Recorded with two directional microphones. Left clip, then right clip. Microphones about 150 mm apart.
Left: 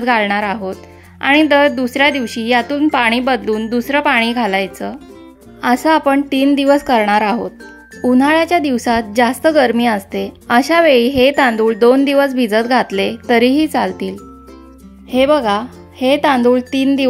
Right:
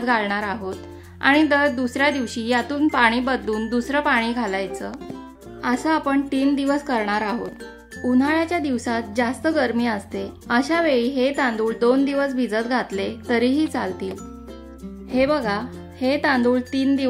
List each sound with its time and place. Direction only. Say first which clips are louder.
0.0 s a woman's voice: left 7 dB; 35° left (ahead or behind)